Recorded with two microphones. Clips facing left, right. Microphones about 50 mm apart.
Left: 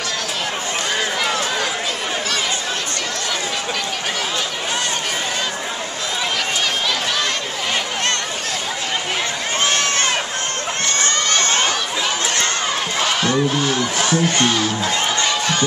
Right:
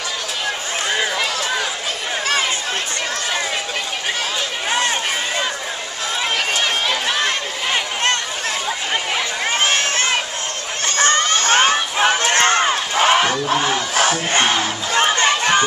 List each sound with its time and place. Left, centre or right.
9.6 s run: right
11.0 s a sound: right
11.4 s crowd: right
13.6 s battle cry: right